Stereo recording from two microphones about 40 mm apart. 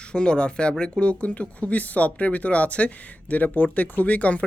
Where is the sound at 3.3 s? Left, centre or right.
Left.